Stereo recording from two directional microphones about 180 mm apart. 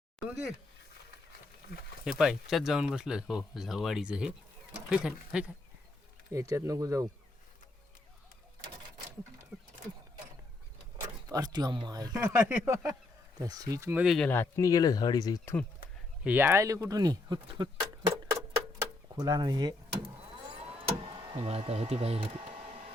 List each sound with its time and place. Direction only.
2.0 s speech: centre (ahead or behind)
6.3 s speech: 15° right (ahead or behind)
9.5 s a sound: centre (ahead or behind)
11.0 s speech: 20° right (ahead or behind)
14.0 s speech: centre (ahead or behind)
14.3 s speech: 15° left (ahead or behind)
16.2 s speech: 10° right (ahead or behind)
20.5 s vehicle: 30° right (ahead or behind)